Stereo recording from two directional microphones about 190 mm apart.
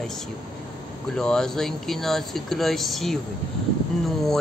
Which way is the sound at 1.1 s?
5° left (ahead or behind).